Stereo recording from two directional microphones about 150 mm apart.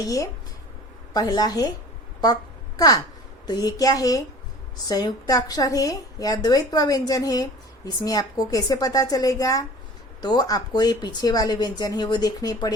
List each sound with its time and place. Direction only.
0.0 s a woman's voice: 25° left (ahead or behind)
2.2 s a sound: 25° left (ahead or behind)
3.4 s a woman's voice: 25° left (ahead or behind)